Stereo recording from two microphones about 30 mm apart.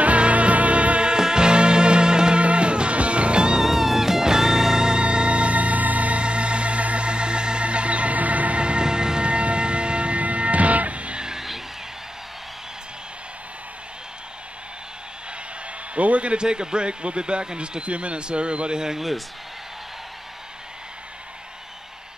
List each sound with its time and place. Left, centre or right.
0.0 s music: right
1.1 s music: right
2.4 s music: right
3.6 s music: centre
5.0 s music: right
6.2 s organ: right
8.5 s music: right
8.8 s a sound: right
10.2 s music: right
11.3 s music: centre
15.9 s a sound: right
16.4 s speech: right
18.9 s speech: centre